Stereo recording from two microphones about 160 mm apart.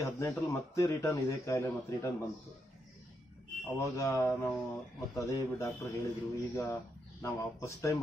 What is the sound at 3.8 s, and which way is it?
Speech, 20° left (ahead or behind).